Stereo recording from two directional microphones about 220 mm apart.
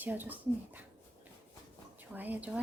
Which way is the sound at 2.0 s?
10° right (ahead or behind).